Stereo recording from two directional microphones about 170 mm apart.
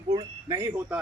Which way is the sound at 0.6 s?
15° right (ahead or behind).